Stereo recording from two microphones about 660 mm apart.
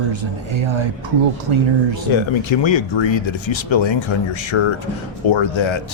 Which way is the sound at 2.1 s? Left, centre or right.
Left.